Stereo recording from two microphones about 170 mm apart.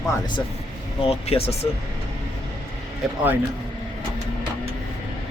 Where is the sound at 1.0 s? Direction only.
35° left (ahead or behind).